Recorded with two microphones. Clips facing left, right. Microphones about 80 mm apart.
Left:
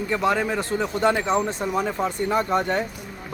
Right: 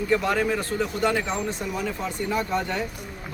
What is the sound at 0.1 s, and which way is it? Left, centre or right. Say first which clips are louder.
Speech: left 1 dB; left.